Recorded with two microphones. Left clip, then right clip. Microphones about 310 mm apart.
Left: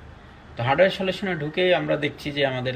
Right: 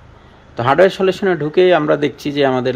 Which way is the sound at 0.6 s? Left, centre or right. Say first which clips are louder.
Right 8 dB; centre.